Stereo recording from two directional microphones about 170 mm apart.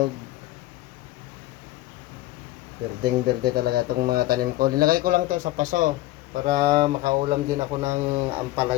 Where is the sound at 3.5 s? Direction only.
65° right (ahead or behind); by 5.9 s 50° right (ahead or behind).